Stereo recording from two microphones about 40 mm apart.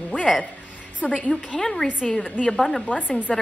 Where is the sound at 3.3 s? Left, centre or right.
Centre.